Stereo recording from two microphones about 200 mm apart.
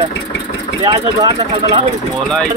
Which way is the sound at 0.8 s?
20° right (ahead or behind).